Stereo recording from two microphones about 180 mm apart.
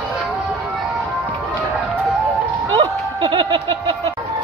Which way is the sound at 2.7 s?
25° right (ahead or behind).